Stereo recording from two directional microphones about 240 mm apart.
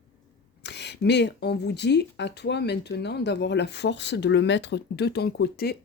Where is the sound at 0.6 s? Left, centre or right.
Left.